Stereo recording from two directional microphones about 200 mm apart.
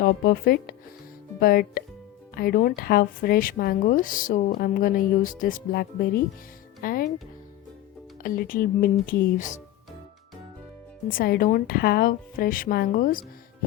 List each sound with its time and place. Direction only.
0.0 s speech: 50° left (ahead or behind)
8.2 s speech: 45° left (ahead or behind)
11.1 s speech: 45° left (ahead or behind)